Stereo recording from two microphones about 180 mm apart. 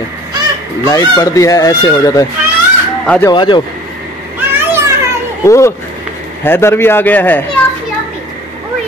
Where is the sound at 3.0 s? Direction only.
10° left (ahead or behind).